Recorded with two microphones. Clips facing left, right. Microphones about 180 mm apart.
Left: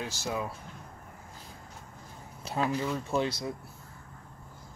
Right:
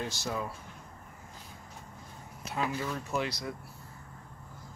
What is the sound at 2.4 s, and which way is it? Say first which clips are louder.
Speech: left 3 dB; 30° left (ahead or behind).